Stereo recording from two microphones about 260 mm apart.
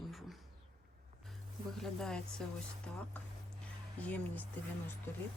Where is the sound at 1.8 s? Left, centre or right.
Centre.